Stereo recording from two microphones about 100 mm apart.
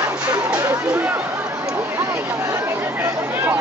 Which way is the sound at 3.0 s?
25° right (ahead or behind).